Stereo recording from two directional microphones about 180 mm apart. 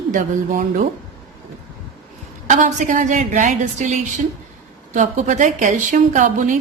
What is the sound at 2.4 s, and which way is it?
A woman's voice, 45° right (ahead or behind).